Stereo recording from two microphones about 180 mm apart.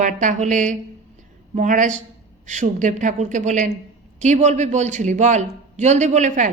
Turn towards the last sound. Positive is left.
turn(degrees=-45)  # may be behind; listen again after turning